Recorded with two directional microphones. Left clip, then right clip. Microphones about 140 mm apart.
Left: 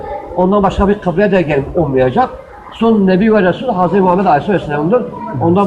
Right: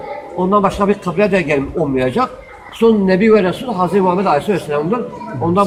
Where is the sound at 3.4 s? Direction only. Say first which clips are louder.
Left 4 dB; 40° right (ahead or behind).